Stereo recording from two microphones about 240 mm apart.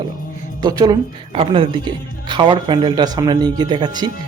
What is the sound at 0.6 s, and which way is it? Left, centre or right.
A woman's voice, centre.